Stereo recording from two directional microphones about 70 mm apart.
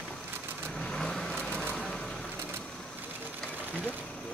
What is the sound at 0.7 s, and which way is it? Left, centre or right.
Vehicle, centre.